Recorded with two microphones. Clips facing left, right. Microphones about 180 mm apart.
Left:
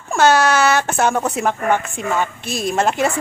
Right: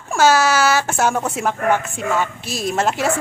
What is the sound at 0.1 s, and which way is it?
A woman's voice, 5° right (ahead or behind).